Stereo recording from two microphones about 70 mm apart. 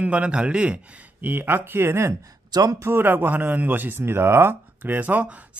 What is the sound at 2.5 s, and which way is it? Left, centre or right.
Speech, right.